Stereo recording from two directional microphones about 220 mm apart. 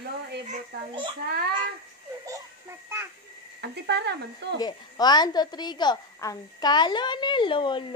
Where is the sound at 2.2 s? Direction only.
15° right (ahead or behind).